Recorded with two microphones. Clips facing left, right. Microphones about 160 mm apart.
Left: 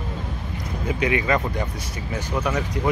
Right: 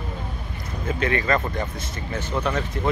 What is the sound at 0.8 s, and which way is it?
Speech, 15° left (ahead or behind).